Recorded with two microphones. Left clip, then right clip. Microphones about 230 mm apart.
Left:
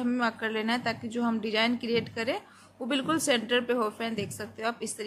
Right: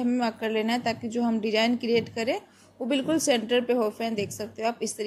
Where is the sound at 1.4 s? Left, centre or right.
Left.